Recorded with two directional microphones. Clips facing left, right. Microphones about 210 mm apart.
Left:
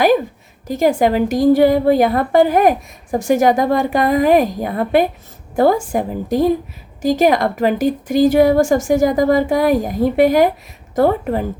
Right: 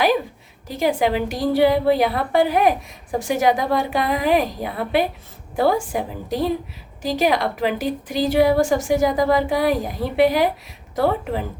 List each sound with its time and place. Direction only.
0.7 s a woman's voice: 45° left (ahead or behind)